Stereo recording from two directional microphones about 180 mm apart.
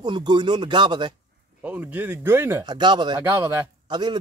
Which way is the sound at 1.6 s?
10° right (ahead or behind).